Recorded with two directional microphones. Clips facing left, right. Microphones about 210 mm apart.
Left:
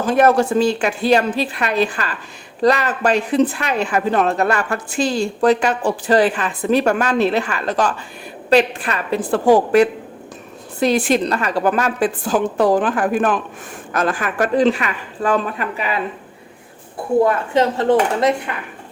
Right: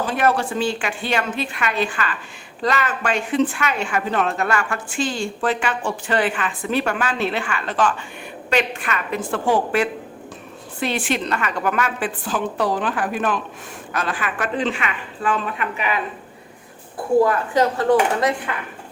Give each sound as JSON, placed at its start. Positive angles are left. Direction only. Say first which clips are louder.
{"t": 0.0, "sound": "speech", "louder": "left 6 dB", "side_deg": 45}
{"t": 17.2, "sound": "a woman's voice", "louder": "left 2 dB", "side_deg": 25}